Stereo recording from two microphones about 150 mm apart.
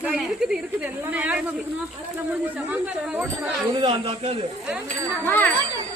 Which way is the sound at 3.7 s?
35° right (ahead or behind).